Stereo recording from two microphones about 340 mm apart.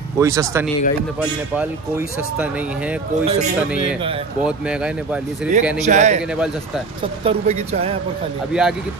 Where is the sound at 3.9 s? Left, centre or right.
Centre.